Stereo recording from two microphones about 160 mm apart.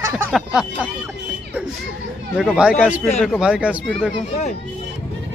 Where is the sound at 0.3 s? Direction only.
5° right (ahead or behind).